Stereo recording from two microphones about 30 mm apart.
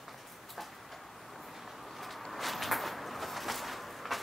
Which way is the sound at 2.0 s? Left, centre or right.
Centre.